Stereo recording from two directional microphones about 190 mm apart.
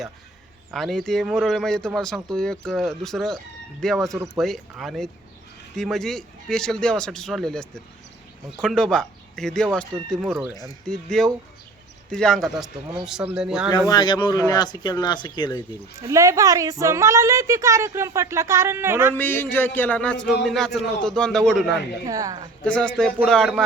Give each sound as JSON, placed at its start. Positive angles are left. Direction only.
{"t": 0.7, "sound": "speech", "side_deg": 0}
{"t": 13.7, "sound": "speech", "side_deg": 20}
{"t": 16.0, "sound": "a woman's voice", "side_deg": -15}
{"t": 19.1, "sound": "speech", "side_deg": 10}
{"t": 22.0, "sound": "a woman's voice", "side_deg": -20}
{"t": 22.6, "sound": "speech", "side_deg": 5}